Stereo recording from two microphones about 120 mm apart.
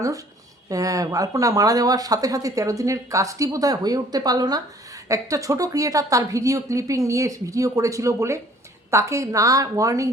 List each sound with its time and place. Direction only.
0.7 s speech: 30° right (ahead or behind)